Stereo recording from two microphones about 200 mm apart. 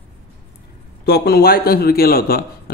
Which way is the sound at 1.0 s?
50° left (ahead or behind).